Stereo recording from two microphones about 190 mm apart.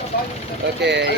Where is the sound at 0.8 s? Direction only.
65° right (ahead or behind).